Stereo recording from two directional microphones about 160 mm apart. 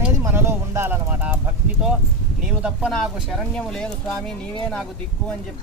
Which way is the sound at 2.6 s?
5° right (ahead or behind).